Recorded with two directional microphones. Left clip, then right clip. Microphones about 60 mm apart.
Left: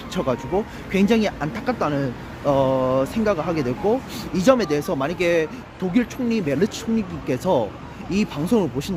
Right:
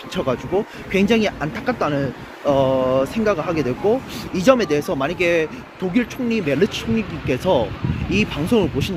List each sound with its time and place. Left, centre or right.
0.1 s speech: left